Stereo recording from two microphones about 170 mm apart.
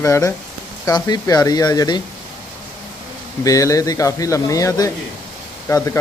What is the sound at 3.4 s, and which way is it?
A man's voice, 20° left (ahead or behind).